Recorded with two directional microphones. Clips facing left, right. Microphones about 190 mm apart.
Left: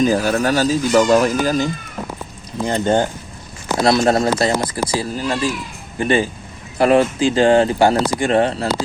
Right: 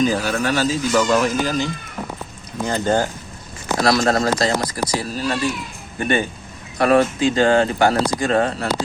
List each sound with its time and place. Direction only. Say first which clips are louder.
0.0 s speech: left 3 dB; 45° left (ahead or behind)
2.6 s speech: left 2 dB; 25° left (ahead or behind)